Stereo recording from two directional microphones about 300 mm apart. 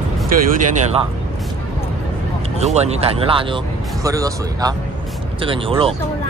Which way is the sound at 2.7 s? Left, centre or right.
Right.